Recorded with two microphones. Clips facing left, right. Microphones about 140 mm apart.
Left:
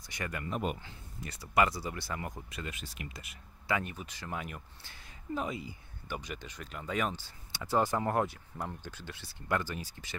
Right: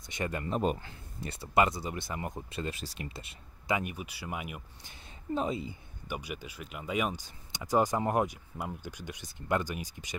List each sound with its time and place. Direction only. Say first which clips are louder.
0.0 s speech: right 4 dB; 25° right (ahead or behind)
3.7 s speech: right 2 dB; 15° right (ahead or behind)
4.9 s speech: right 4 dB; 25° right (ahead or behind)
6.0 s speech: right 2 dB; 10° right (ahead or behind)